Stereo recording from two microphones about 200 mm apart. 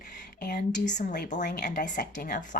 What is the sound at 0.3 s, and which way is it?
A woman's voice, 50° left (ahead or behind).